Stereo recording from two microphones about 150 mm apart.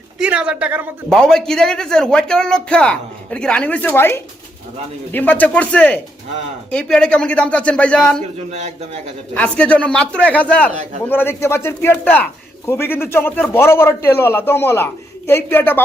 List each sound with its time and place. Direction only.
0.2 s speech: 10° right (ahead or behind)
1.1 s a man's voice: 5° left (ahead or behind)
8.2 s speech: 50° right (ahead or behind)
9.3 s a man's voice: 10° left (ahead or behind)